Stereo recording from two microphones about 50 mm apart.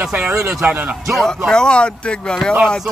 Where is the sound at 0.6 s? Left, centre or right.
Right.